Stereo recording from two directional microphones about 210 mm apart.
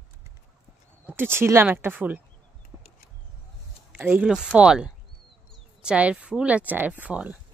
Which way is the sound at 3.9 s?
5° right (ahead or behind).